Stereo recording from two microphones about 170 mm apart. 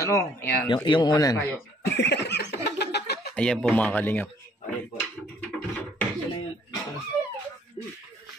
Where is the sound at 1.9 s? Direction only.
90° left; by 3.3 s 75° left (ahead or behind).